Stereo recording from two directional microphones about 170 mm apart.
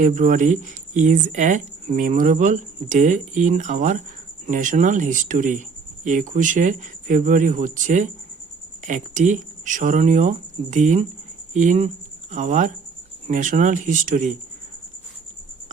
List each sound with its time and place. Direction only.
0.0 s speech: 50° right (ahead or behind)